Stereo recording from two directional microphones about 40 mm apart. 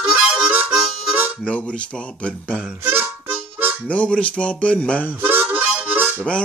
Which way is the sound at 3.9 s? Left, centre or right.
Left.